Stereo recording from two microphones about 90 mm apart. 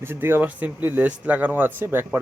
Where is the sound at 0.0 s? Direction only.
25° right (ahead or behind).